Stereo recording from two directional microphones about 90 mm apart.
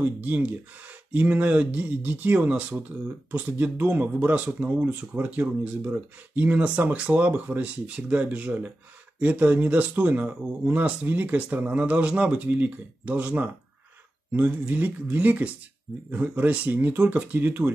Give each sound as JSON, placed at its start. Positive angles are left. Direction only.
{"t": 0.0, "sound": "speech", "side_deg": -20}